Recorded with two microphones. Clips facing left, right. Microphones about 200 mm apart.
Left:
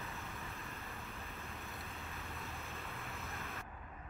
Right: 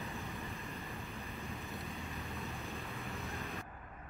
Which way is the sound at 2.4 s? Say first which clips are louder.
Right 4 dB; 15° right (ahead or behind).